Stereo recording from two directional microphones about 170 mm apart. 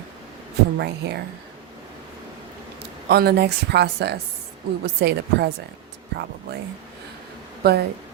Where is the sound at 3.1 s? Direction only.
75° right (ahead or behind).